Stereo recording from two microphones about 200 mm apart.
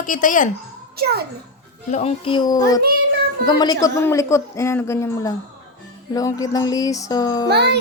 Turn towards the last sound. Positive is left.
turn(degrees=-55)  # may be behind; listen again after turning